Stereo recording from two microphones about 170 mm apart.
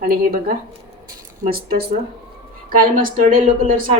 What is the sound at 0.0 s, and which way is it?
A woman's voice, 60° right (ahead or behind).